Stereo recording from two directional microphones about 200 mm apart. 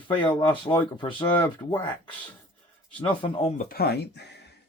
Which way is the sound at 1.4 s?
15° left (ahead or behind).